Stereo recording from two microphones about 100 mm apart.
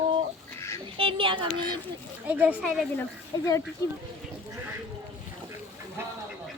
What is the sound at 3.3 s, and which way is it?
Speech, 45° left (ahead or behind).